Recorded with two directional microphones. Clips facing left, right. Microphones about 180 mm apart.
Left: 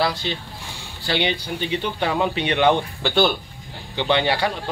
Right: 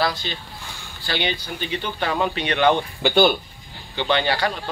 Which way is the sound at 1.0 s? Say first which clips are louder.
Left 3 dB; 20° left (ahead or behind).